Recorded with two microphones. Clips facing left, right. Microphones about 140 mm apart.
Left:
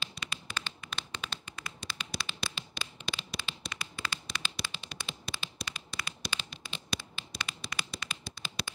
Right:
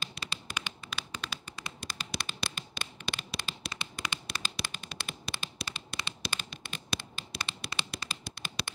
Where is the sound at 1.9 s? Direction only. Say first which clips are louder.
Right 1 dB; 45° right (ahead or behind).